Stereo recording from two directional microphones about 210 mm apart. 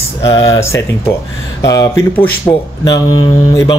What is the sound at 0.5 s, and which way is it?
Speech, 15° left (ahead or behind).